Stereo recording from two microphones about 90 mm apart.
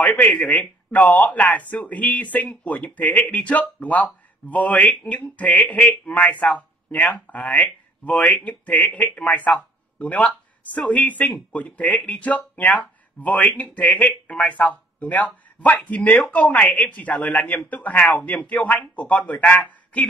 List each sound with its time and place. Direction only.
0.0 s speech: 15° left (ahead or behind)